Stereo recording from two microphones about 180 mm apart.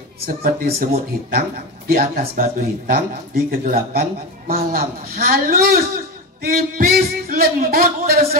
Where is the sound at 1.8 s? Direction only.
55° right (ahead or behind).